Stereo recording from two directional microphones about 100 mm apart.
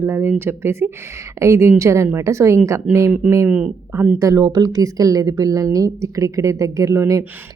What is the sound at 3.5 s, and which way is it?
Speech, 15° right (ahead or behind).